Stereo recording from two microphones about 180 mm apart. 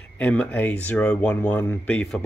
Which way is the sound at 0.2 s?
10° left (ahead or behind).